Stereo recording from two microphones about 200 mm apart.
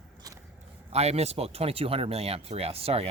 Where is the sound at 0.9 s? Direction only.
30° right (ahead or behind).